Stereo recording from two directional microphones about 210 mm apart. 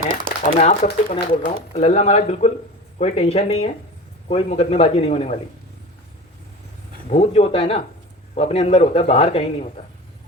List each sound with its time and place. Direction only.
0.5 s a man's voice: 35° left (ahead or behind)
7.1 s a man's voice: 30° left (ahead or behind)